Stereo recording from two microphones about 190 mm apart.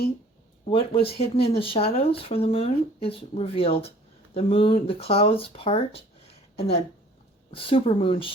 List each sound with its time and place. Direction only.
0.7 s speech: 30° left (ahead or behind)